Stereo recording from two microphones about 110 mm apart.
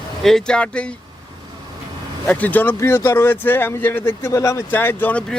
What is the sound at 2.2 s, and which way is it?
Speech, 15° left (ahead or behind).